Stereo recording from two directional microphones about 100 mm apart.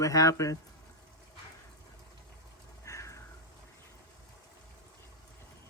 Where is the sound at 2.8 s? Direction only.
30° left (ahead or behind).